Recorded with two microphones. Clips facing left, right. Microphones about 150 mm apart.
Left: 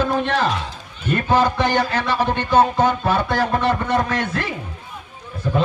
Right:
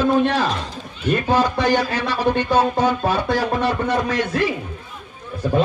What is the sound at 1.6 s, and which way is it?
Speech, 55° left (ahead or behind).